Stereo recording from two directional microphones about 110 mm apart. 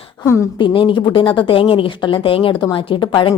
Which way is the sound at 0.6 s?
50° left (ahead or behind).